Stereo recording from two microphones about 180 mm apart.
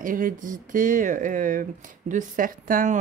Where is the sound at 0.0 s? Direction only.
50° right (ahead or behind).